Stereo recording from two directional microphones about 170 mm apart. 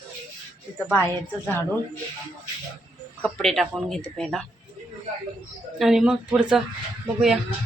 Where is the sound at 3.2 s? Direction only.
Centre (ahead or behind).